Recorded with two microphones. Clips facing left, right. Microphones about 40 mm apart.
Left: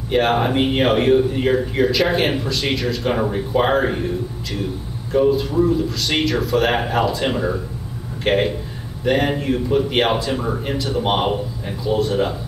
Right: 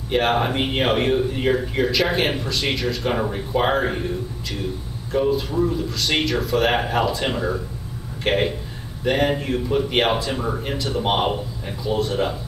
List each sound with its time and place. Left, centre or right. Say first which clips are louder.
0.1 s speech: left 3 dB; centre